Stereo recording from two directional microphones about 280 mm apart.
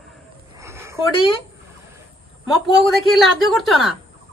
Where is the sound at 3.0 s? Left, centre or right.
Centre.